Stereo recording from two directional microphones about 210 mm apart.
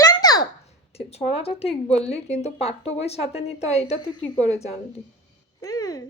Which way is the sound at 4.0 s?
20° left (ahead or behind).